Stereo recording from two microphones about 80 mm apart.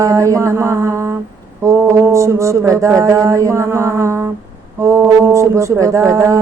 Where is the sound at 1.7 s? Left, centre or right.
Right.